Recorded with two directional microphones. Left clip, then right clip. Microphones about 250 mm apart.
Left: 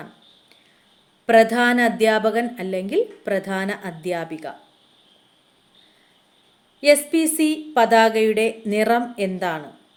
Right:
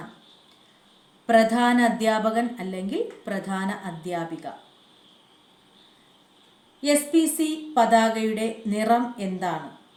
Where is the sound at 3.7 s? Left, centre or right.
Left.